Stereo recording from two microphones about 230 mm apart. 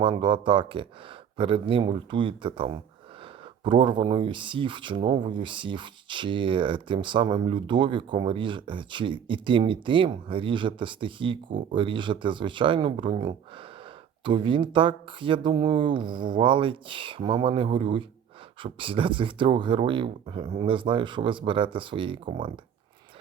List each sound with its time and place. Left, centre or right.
0.0 s speech: right